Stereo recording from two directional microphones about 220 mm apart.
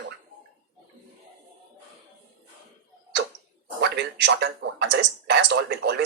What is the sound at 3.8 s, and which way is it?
Speech, 50° right (ahead or behind).